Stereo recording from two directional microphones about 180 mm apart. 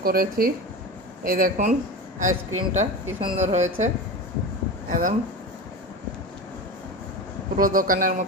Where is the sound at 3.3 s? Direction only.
40° right (ahead or behind).